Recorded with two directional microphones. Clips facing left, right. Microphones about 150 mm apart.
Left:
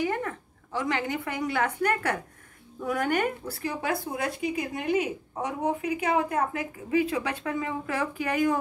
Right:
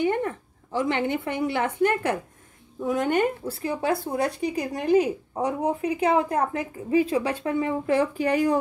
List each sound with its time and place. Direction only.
0.0 s a woman's voice: 30° right (ahead or behind)